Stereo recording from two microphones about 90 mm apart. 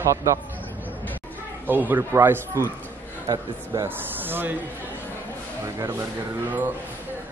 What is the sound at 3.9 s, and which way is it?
Speech, 20° right (ahead or behind).